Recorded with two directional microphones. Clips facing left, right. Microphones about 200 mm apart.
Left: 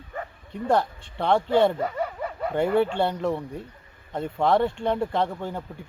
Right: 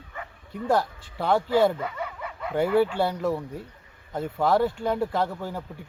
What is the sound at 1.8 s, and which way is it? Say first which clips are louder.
Snicker: left 5 dB; 40° left (ahead or behind).